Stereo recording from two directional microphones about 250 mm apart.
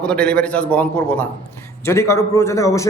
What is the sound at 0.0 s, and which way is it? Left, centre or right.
A man's voice, centre.